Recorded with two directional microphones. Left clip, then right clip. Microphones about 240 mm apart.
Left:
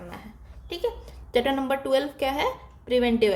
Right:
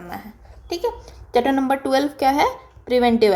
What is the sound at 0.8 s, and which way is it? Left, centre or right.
Speech, centre.